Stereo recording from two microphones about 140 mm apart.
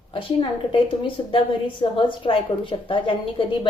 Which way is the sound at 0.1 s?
40° left (ahead or behind).